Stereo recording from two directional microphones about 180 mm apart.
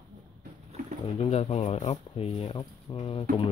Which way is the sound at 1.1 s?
35° left (ahead or behind).